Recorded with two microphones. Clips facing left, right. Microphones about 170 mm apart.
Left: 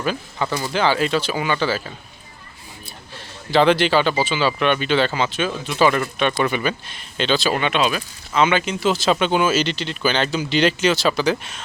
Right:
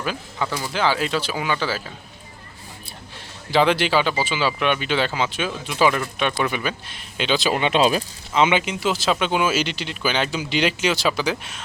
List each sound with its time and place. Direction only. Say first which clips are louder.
0.0 s speech: left 3 dB; 5° right (ahead or behind)
3.5 s speech: left 3 dB; 10° right (ahead or behind)
7.7 s speech: right 2 dB; 35° right (ahead or behind)
8.3 s speech: left 1 dB; 20° right (ahead or behind)